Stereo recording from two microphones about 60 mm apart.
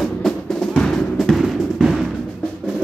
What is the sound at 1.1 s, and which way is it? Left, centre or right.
Music, centre.